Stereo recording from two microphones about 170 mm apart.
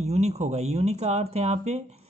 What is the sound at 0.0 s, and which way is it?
Speech, 40° right (ahead or behind).